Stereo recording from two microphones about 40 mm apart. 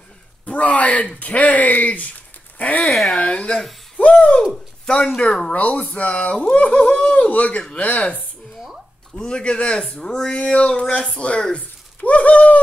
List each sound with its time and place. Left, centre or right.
0.5 s speech: left
2.8 s speech: centre
3.2 s speech: left
3.5 s a sound: centre
4.0 s a sound: left
4.8 s speech: left
5.5 s speech: left
9.2 s speech: left
9.9 s speech: centre
10.4 s speech: left
11.5 s speech: left